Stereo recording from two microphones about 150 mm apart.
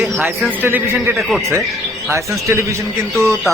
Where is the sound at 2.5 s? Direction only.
20° right (ahead or behind).